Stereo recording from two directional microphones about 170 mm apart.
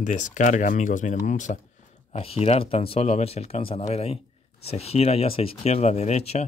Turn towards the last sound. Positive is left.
turn(degrees=40)  # may be behind; listen again after turning